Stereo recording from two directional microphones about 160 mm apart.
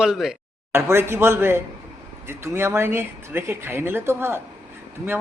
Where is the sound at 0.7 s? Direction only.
15° right (ahead or behind).